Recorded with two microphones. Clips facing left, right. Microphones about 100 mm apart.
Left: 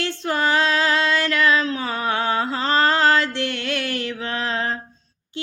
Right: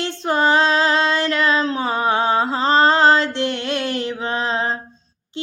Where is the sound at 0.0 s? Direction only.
25° right (ahead or behind).